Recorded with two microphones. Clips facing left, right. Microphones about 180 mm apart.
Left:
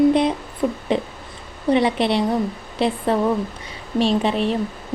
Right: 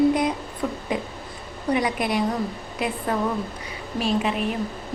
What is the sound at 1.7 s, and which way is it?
A woman's voice, 25° left (ahead or behind).